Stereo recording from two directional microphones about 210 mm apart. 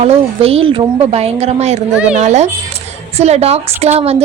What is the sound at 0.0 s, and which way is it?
A woman's voice, 30° right (ahead or behind).